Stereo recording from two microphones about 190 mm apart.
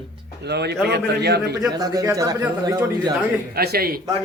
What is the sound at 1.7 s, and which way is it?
Speech, 20° right (ahead or behind).